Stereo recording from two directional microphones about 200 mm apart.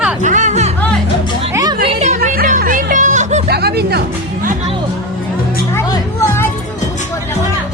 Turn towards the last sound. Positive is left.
turn(degrees=10)  # may be behind; listen again after turning